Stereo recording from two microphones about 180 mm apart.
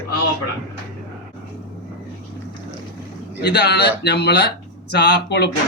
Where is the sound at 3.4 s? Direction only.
70° left (ahead or behind).